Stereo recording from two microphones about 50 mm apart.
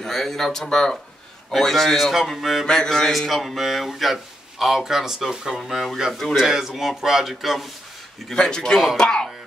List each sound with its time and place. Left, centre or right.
0.0 s speech: centre
2.6 s speech: centre
3.1 s speech: centre
8.4 s speech: centre